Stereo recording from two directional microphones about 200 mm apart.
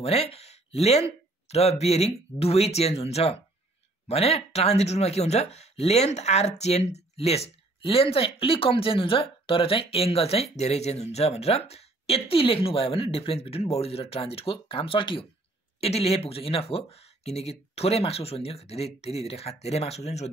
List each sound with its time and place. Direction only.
0.0 s speech: 30° left (ahead or behind)